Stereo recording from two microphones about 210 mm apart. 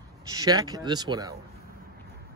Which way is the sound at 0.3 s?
20° right (ahead or behind).